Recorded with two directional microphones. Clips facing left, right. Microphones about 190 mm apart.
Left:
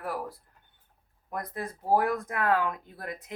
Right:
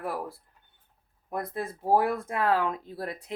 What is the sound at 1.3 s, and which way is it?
Speech, 25° right (ahead or behind).